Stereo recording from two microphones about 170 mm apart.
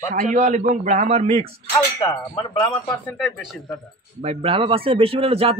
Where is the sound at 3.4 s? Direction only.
Centre (ahead or behind).